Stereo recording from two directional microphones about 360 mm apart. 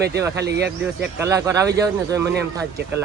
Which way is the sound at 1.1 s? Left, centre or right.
Centre.